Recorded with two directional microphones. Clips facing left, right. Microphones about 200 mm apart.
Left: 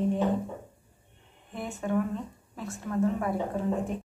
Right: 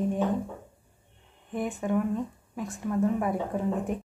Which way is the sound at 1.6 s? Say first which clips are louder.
Right 1 dB; 15° right (ahead or behind).